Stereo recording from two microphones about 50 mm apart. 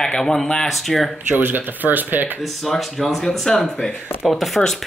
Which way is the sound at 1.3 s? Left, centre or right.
Right.